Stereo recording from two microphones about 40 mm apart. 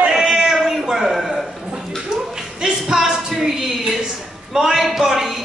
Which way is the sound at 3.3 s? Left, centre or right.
Centre.